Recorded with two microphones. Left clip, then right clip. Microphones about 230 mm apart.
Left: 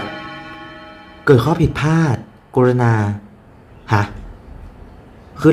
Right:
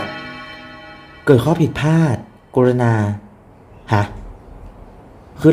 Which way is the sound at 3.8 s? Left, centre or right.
Centre.